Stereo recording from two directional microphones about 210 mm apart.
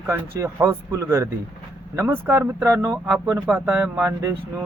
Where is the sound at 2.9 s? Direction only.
5° right (ahead or behind).